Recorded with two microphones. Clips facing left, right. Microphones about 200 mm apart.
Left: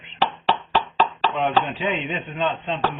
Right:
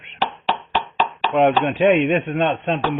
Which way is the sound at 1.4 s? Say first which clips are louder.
Right 8 dB; 65° right (ahead or behind).